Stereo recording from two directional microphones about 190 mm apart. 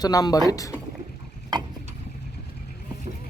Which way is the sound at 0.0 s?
20° left (ahead or behind).